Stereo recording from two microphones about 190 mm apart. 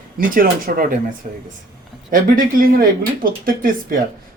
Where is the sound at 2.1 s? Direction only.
45° right (ahead or behind).